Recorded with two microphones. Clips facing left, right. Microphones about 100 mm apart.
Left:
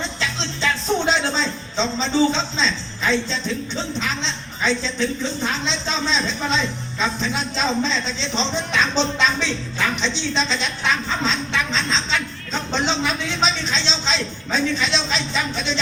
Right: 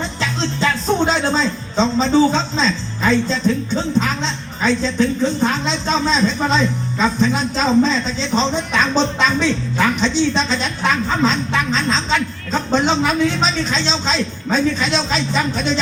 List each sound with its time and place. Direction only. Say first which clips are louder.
0.2 s speech: right 8 dB; 45° right (ahead or behind)